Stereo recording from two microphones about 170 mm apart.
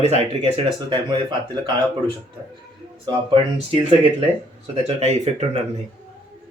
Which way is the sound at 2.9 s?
30° right (ahead or behind).